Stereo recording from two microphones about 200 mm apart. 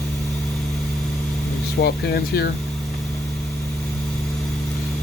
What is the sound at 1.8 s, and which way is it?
Speech, 55° left (ahead or behind).